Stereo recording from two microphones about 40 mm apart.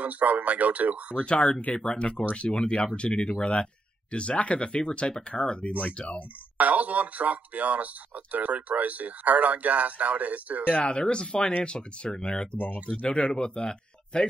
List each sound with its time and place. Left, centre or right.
0.0 s speech: right
1.2 s speech: left
5.7 s speech: left
6.6 s speech: right
10.8 s speech: left
12.5 s speech: left
12.9 s speech: left